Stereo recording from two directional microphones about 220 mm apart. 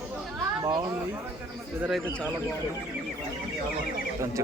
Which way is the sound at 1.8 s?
Centre (ahead or behind).